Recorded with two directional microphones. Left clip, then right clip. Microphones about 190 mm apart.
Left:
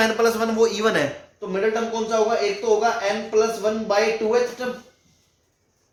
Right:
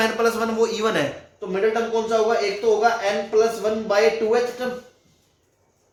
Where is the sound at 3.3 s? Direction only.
15° left (ahead or behind).